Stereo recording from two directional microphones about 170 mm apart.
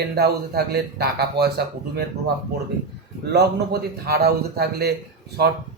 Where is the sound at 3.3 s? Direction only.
65° right (ahead or behind).